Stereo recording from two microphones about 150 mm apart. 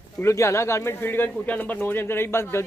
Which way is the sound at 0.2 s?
20° left (ahead or behind).